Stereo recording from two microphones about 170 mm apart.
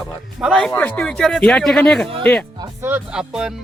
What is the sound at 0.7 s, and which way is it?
Speech, 10° left (ahead or behind).